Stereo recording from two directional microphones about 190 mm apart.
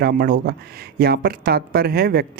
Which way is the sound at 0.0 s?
55° right (ahead or behind).